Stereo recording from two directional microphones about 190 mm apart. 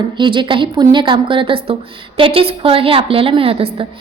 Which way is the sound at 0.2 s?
25° right (ahead or behind).